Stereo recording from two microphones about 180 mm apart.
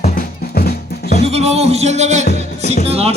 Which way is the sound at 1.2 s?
35° right (ahead or behind).